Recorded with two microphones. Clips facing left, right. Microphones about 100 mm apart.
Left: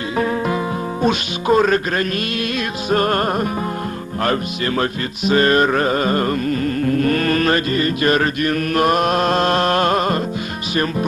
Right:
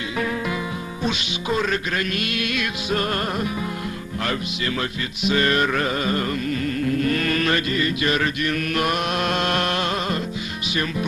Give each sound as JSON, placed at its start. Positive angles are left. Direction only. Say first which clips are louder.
{"t": 1.0, "sound": "music", "louder": "left 7 dB", "side_deg": 45}
{"t": 10.7, "sound": "speech", "louder": "left 5 dB", "side_deg": 40}